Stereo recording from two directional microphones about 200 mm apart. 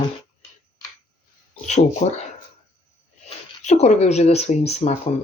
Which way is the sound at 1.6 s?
35° left (ahead or behind).